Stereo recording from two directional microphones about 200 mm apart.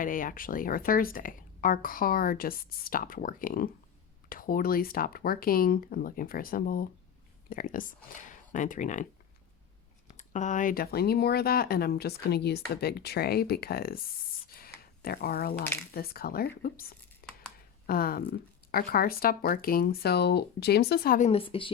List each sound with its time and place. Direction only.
0.0 s a woman's voice: 45° left (ahead or behind)
10.1 s a woman's voice: 35° left (ahead or behind)
14.5 s a sound: 50° left (ahead or behind)
16.0 s a woman's voice: 50° left (ahead or behind)
17.2 s a sound: 45° left (ahead or behind)
17.8 s a woman's voice: 50° left (ahead or behind)
21.2 s a woman's voice: 30° left (ahead or behind)